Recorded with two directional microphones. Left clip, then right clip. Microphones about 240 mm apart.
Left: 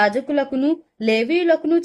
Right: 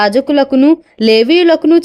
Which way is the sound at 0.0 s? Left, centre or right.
Right.